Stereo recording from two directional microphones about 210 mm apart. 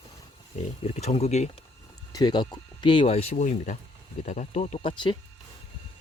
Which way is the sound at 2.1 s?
20° left (ahead or behind).